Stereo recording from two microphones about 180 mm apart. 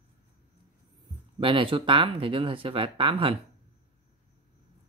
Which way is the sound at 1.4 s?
30° right (ahead or behind).